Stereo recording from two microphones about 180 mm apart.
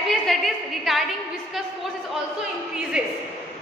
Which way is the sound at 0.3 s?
Centre (ahead or behind).